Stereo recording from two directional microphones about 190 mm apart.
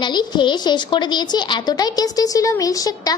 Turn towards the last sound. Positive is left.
turn(degrees=20)  # may be behind; listen again after turning